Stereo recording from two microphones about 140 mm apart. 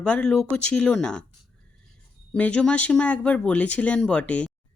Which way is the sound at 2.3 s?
5° left (ahead or behind).